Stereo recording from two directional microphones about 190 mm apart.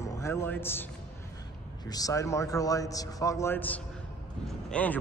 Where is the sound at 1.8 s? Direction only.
20° left (ahead or behind).